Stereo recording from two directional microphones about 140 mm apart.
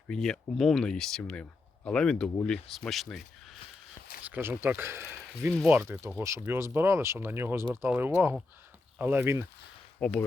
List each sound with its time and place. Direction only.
0.1 s speech: 5° left (ahead or behind)
4.3 s speech: 15° right (ahead or behind)
10.0 s speech: 5° left (ahead or behind)